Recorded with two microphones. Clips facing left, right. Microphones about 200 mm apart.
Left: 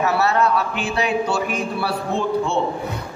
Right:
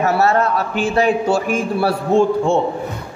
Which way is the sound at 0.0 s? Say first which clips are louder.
Right 3 dB; 45° right (ahead or behind).